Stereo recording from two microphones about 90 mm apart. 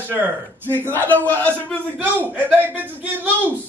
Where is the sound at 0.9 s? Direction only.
20° left (ahead or behind).